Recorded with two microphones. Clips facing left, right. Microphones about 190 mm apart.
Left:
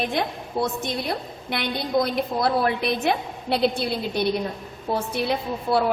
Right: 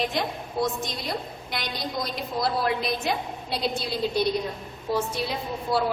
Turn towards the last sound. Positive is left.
turn(degrees=60)  # may be behind; listen again after turning